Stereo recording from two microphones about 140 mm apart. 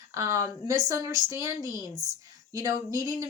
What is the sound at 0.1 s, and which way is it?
Speech, 20° right (ahead or behind).